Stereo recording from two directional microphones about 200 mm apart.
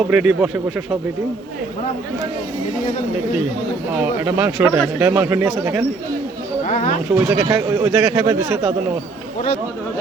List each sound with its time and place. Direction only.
0.1 s speech: 5° right (ahead or behind)
4.0 s speech: 10° right (ahead or behind)
6.7 s speech: 35° left (ahead or behind)
7.1 s speech: 10° right (ahead or behind)